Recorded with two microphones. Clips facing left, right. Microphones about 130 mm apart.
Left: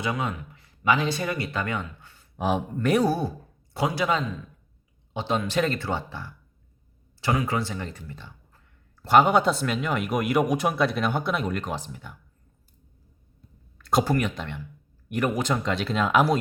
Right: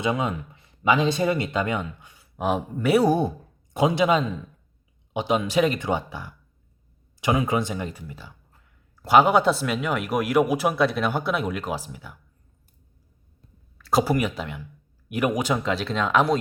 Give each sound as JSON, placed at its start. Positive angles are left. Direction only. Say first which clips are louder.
{"t": 0.0, "sound": "speech", "louder": "right 4 dB", "side_deg": -20}
{"t": 2.4, "sound": "speech", "louder": "right 1 dB", "side_deg": 0}
{"t": 3.1, "sound": "a man's voice", "louder": "right 5 dB", "side_deg": -20}
{"t": 13.7, "sound": "speech", "louder": "right 1 dB", "side_deg": -5}